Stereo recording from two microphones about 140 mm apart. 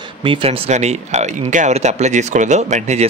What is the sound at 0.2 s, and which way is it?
Speech, 40° right (ahead or behind).